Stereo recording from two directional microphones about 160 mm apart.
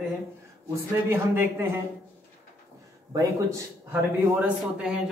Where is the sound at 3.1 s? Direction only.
20° right (ahead or behind).